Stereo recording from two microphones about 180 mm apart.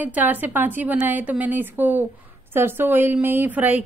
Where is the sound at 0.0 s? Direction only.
10° right (ahead or behind).